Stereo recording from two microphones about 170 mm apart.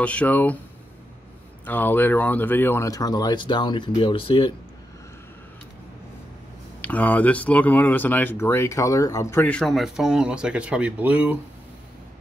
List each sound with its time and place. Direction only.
0.0 s speech: 10° left (ahead or behind)
1.7 s speech: 10° left (ahead or behind); by 4.6 s 30° left (ahead or behind)
6.8 s speech: 10° left (ahead or behind); by 11.3 s 10° right (ahead or behind)